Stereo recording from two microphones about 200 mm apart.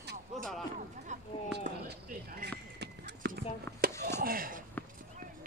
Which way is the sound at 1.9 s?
55° right (ahead or behind).